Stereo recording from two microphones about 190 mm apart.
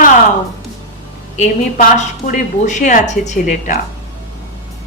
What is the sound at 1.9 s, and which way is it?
Speech, 40° left (ahead or behind).